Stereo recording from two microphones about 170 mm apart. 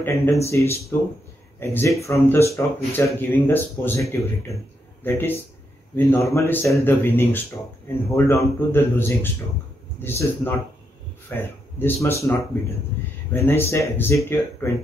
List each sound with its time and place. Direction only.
0.0 s speech: 15° left (ahead or behind)
13.5 s speech: 15° left (ahead or behind)